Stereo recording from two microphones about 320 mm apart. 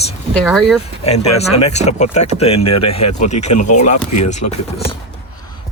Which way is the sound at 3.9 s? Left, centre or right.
Left.